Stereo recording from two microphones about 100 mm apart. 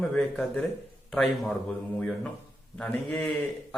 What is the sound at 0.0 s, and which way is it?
Speech, 15° left (ahead or behind).